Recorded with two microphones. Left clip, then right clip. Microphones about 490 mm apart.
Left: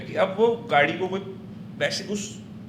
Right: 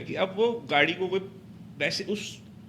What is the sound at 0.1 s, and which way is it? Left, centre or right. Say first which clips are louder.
A man's voice: left 5 dB; right.